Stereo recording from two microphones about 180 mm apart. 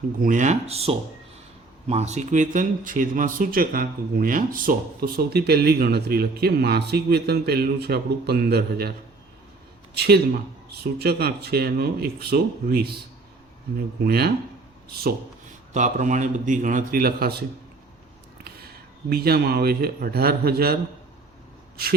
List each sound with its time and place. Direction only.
0.2 s speech: 45° right (ahead or behind); by 8.9 s 60° right (ahead or behind)
9.9 s speech: 60° right (ahead or behind)
14.0 s speech: 60° right (ahead or behind)
15.7 s a man's voice: 40° right (ahead or behind); by 17.4 s 60° right (ahead or behind)
18.4 s speech: 60° right (ahead or behind)